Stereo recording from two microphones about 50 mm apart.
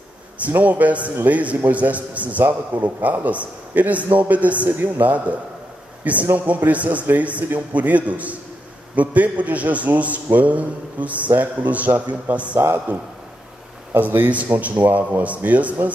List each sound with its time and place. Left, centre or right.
0.6 s a man's voice: right
6.3 s a man's voice: right